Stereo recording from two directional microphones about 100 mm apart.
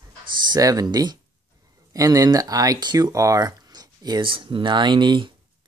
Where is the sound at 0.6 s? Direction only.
35° right (ahead or behind).